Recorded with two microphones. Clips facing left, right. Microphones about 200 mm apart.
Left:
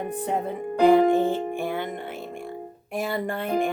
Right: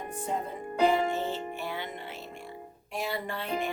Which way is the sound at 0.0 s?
65° left (ahead or behind).